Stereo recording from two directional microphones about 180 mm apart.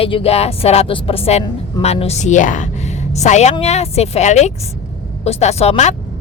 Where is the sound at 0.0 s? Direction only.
35° left (ahead or behind).